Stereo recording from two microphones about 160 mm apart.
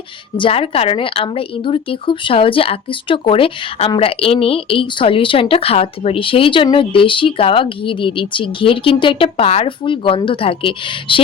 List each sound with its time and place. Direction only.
0.3 s a woman's voice: 35° left (ahead or behind)